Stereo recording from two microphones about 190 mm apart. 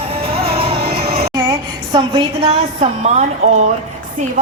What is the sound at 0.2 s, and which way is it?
Music, 30° right (ahead or behind).